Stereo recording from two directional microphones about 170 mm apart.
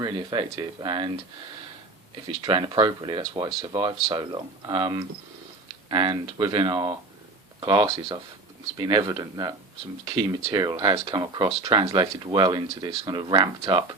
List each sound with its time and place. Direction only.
0.0 s speech: 25° right (ahead or behind)
2.2 s speech: 25° right (ahead or behind)